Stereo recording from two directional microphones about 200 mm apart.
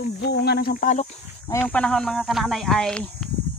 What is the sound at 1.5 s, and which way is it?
Speech, 10° left (ahead or behind).